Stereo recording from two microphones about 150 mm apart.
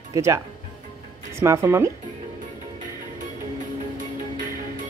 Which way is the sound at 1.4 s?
20° right (ahead or behind).